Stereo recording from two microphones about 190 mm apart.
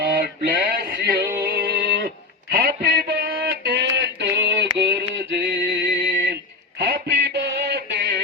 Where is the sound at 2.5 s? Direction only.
50° right (ahead or behind).